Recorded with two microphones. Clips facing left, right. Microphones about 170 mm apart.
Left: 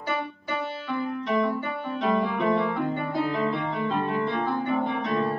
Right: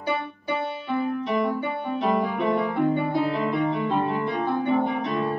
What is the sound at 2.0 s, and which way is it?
Music, 10° right (ahead or behind).